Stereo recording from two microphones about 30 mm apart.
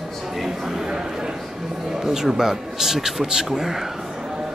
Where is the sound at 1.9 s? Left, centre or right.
Centre.